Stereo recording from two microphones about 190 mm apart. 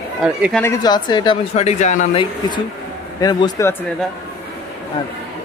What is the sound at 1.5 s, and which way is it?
Speech, 35° left (ahead or behind).